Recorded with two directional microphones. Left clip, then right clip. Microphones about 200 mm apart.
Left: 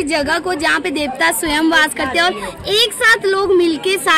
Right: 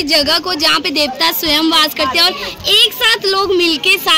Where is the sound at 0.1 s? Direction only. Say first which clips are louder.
Right 5 dB; 20° left (ahead or behind).